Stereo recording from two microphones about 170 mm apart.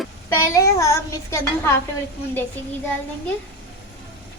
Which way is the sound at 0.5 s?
20° left (ahead or behind).